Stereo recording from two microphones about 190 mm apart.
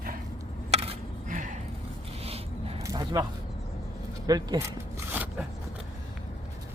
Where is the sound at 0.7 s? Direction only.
35° right (ahead or behind).